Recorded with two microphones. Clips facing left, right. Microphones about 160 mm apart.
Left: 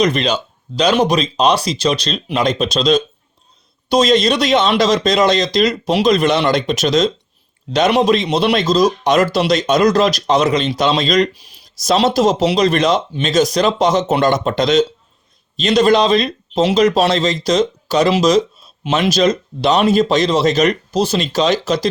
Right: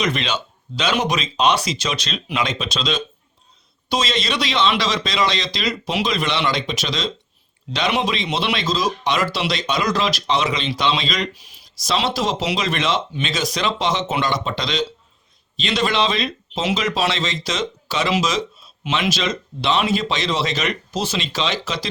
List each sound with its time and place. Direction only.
0.0 s speech: 40° left (ahead or behind)